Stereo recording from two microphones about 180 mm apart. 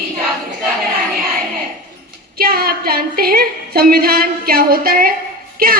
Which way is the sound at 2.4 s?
60° right (ahead or behind).